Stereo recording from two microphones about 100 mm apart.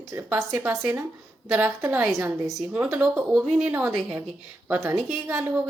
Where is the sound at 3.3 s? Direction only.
5° right (ahead or behind).